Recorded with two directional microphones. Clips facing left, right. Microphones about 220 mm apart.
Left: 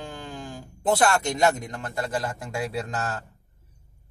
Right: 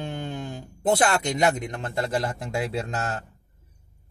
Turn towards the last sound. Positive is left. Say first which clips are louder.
# right 1 dB
turn(degrees=-20)  # may be behind; listen again after turning